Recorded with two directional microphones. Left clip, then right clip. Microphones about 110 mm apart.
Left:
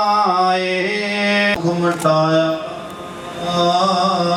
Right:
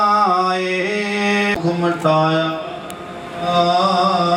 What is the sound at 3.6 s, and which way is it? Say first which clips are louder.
Mantra: even; 20° right (ahead or behind).